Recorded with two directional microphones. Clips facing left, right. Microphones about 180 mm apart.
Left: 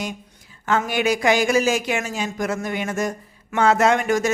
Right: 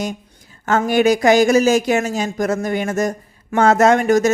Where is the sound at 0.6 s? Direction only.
45° right (ahead or behind).